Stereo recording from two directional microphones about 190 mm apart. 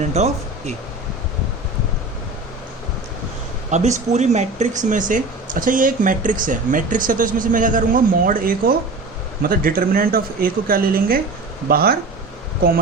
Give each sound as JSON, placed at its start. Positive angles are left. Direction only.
{"t": 0.0, "sound": "speech", "side_deg": -35}
{"t": 3.7, "sound": "speech", "side_deg": -40}